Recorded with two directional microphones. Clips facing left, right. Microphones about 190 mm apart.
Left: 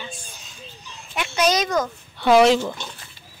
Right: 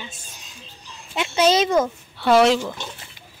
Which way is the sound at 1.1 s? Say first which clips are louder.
Right 3 dB; 25° right (ahead or behind).